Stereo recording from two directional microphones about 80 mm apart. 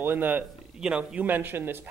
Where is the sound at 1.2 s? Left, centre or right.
Right.